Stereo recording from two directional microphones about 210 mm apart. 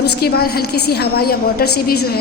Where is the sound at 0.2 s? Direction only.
50° left (ahead or behind).